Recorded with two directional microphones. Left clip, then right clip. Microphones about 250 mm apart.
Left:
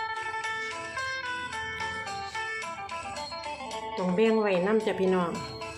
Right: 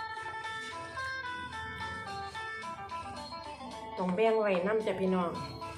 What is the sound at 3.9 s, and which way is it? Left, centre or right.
Speech, left.